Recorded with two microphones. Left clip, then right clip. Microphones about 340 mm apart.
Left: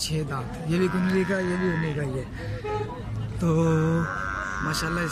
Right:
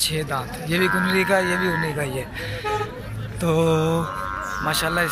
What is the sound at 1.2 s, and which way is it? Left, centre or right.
Speech, right.